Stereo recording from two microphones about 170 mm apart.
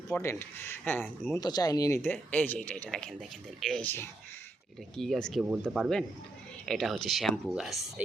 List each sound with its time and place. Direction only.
0.1 s a man's voice: 15° left (ahead or behind); by 8.0 s centre (ahead or behind)